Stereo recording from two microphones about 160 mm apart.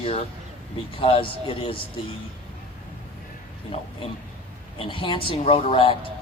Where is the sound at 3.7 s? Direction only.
35° left (ahead or behind).